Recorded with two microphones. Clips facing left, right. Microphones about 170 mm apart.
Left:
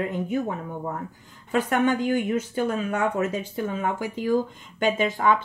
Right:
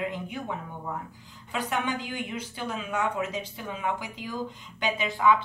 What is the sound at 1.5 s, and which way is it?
Speech, 50° left (ahead or behind).